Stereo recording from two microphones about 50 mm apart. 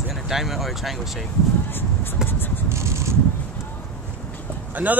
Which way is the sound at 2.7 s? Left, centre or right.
Right.